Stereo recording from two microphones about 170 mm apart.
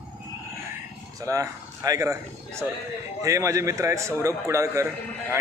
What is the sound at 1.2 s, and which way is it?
A man's voice, 20° right (ahead or behind).